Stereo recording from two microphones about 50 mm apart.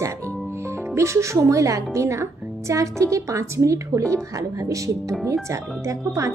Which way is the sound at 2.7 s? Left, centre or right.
Right.